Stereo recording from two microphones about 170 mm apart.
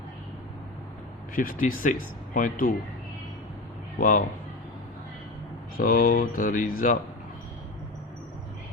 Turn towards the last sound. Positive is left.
turn(degrees=55)  # may be behind; listen again after turning